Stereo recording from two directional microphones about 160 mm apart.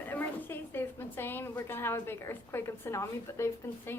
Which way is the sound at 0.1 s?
10° left (ahead or behind).